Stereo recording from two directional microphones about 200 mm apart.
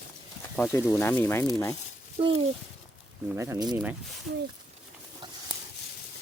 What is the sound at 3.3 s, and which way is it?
Speech, 15° right (ahead or behind).